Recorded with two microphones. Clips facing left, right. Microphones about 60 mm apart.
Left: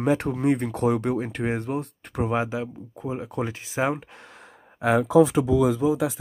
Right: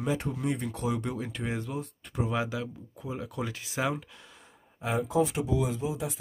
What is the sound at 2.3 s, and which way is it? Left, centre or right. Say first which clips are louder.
Speech: left 5 dB; left.